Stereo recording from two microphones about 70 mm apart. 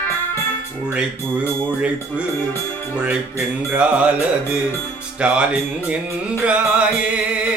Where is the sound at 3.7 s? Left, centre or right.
Centre.